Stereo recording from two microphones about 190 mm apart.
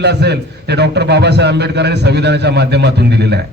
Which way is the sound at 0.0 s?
60° right (ahead or behind).